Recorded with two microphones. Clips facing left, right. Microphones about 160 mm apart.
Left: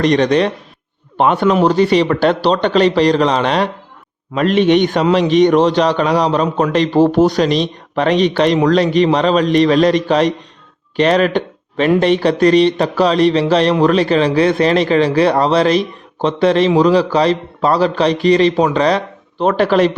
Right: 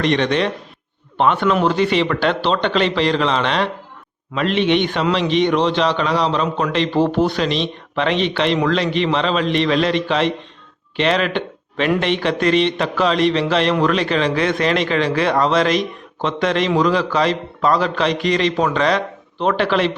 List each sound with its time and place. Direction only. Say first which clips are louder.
0.0 s a man's voice: left 5 dB; 40° left (ahead or behind)